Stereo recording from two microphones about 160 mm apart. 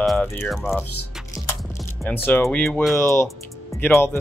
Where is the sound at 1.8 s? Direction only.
10° left (ahead or behind).